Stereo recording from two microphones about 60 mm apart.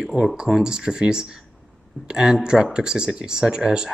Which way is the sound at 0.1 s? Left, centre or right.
Centre.